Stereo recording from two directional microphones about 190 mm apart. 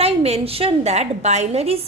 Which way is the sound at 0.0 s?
30° right (ahead or behind).